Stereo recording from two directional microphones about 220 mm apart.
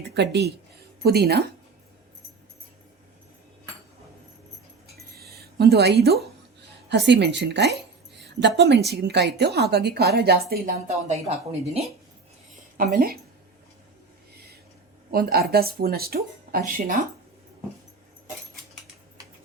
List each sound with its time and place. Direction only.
0.1 s a woman's voice: 50° right (ahead or behind)
5.1 s a sound: 45° right (ahead or behind)
6.8 s a woman's voice: 50° right (ahead or behind)
10.8 s speech: 30° right (ahead or behind)
12.7 s a woman's voice: 40° right (ahead or behind)
15.1 s a woman's voice: 45° right (ahead or behind)